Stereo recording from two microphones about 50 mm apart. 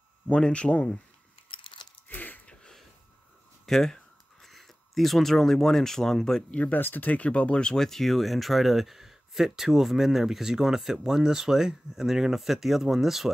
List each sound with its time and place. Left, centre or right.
0.3 s speech: left
2.0 s a sound: left
3.6 s speech: centre
6.5 s speech: left; by 13.3 s centre